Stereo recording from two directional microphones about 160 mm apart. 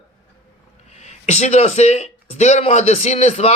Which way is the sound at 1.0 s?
45° left (ahead or behind).